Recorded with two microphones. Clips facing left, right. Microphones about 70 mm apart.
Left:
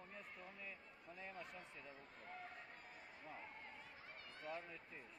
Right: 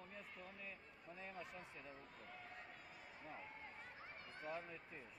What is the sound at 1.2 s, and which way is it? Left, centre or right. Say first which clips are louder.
Speech: right 1 dB; centre.